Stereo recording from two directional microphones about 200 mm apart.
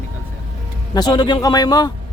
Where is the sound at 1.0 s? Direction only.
20° left (ahead or behind).